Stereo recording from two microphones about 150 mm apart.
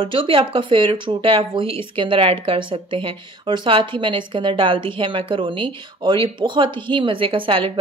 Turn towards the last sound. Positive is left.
turn(degrees=-35)  # may be behind; listen again after turning